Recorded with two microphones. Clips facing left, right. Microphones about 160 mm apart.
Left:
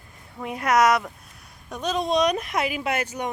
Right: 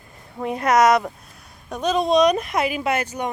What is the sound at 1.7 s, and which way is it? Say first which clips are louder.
Speech: right 5 dB; 50° right (ahead or behind).